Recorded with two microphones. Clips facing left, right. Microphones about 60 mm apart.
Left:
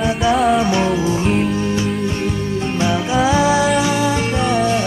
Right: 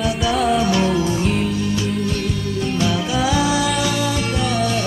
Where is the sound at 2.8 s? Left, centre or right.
Left.